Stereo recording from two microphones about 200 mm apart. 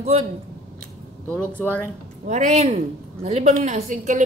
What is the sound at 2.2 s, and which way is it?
Speech, 35° right (ahead or behind).